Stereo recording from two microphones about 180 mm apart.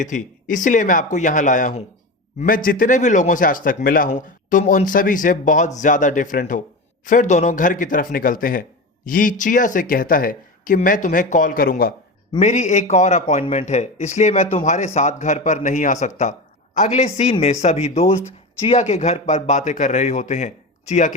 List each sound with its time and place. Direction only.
0.0 s speech: 45° left (ahead or behind)
12.4 s a man's voice: 40° left (ahead or behind)